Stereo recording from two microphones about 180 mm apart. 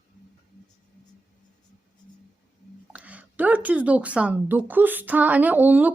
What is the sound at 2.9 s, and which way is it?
Speech, 10° right (ahead or behind).